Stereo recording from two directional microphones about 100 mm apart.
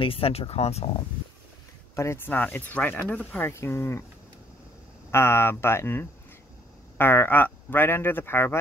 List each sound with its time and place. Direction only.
0.0 s speech: 70° left (ahead or behind); by 0.8 s 90° left
2.0 s speech: 25° left (ahead or behind)
5.1 s speech: 25° left (ahead or behind)